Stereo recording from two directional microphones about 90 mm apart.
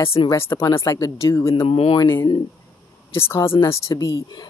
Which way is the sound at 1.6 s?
90° left.